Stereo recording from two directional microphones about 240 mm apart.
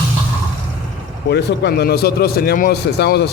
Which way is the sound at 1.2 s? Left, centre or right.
Left.